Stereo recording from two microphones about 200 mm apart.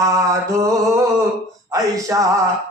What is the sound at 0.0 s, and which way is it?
A man's voice, 15° right (ahead or behind).